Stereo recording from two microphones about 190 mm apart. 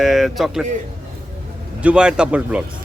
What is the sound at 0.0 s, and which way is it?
Speech, centre (ahead or behind).